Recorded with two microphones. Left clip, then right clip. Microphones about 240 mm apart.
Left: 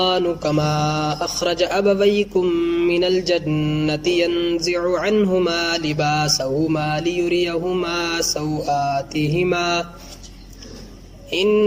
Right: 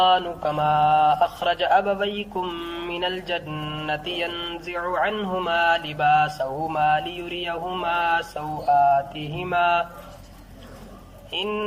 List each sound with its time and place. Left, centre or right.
0.0 s speech: left
3.2 s mantra: left
4.7 s speech: left
11.3 s speech: left